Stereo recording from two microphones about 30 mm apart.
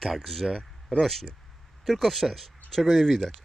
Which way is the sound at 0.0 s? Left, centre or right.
Centre.